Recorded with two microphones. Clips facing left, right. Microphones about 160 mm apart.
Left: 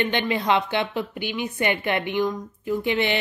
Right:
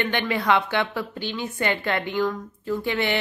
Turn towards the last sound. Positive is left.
turn(degrees=20)  # may be behind; listen again after turning